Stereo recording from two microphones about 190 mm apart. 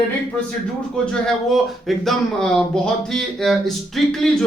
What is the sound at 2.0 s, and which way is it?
Speech, 5° left (ahead or behind).